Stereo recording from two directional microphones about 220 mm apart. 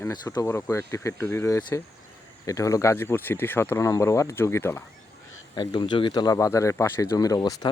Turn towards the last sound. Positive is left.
turn(degrees=15)  # may be behind; listen again after turning